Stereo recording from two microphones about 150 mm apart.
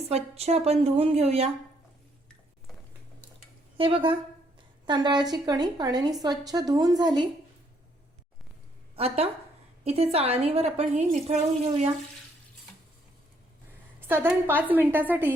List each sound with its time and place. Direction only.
0.0 s a woman's voice: 45° right (ahead or behind)
3.8 s a woman's voice: 35° right (ahead or behind)
9.0 s a woman's voice: 40° right (ahead or behind)
14.1 s a woman's voice: 15° right (ahead or behind)